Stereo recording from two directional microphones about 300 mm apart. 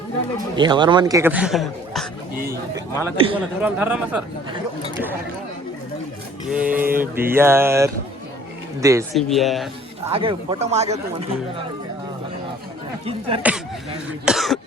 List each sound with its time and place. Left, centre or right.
0.5 s a man's voice: centre
3.0 s a man's voice: centre
3.6 s speech: centre
6.7 s a man's voice: centre
9.1 s speech: centre
10.1 s speech: centre
13.1 s speech: centre
14.3 s speech: centre